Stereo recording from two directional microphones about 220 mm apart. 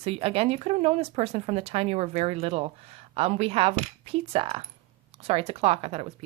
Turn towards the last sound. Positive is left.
turn(degrees=-30)  # may be behind; listen again after turning